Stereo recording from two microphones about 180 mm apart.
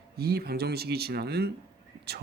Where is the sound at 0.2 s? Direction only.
60° right (ahead or behind).